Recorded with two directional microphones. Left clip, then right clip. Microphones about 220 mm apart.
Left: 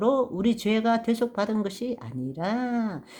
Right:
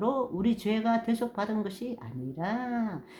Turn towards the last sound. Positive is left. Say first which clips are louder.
# left 3 dB
turn(degrees=35)  # may be behind; listen again after turning